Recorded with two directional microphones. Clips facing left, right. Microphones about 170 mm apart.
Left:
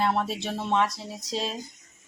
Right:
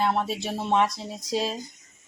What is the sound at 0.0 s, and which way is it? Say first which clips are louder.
Speech: right 1 dB; centre (ahead or behind).